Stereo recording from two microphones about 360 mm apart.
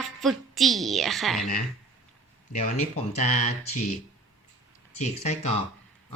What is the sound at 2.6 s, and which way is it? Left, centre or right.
Speech, centre.